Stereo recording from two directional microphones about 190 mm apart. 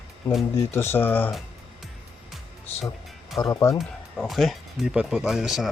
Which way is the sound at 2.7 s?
10° left (ahead or behind).